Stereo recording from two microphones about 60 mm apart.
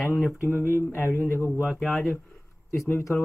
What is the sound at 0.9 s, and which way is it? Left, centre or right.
Speech, left.